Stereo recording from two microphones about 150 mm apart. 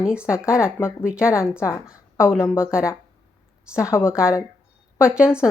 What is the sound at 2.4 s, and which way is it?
Speech, 20° left (ahead or behind).